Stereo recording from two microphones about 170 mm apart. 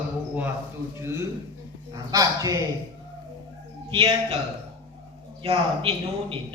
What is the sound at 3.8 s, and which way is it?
Speech, 30° right (ahead or behind).